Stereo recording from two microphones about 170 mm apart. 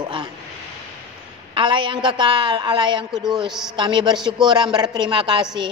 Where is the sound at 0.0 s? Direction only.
25° right (ahead or behind).